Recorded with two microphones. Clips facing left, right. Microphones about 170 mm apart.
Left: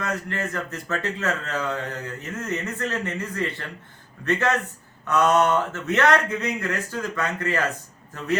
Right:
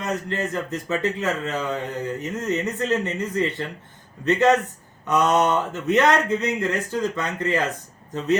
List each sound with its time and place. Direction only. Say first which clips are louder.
0.0 s a man's voice: right 2 dB; 20° right (ahead or behind)